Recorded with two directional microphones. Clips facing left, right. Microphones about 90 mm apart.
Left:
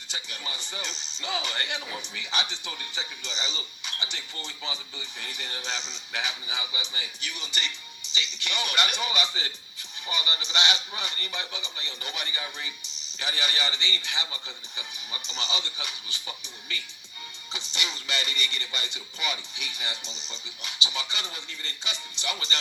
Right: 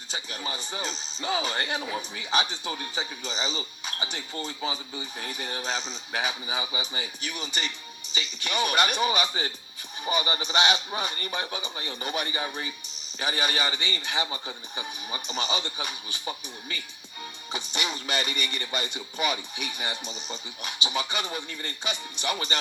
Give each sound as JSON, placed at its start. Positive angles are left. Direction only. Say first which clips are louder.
{"t": 0.1, "sound": "speech", "louder": "right 4 dB", "side_deg": -40}
{"t": 6.6, "sound": "music", "louder": "right 4 dB", "side_deg": -30}
{"t": 7.2, "sound": "speech", "louder": "right 1 dB", "side_deg": -40}